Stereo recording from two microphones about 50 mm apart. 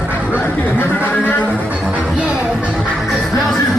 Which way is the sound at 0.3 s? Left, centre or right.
Left.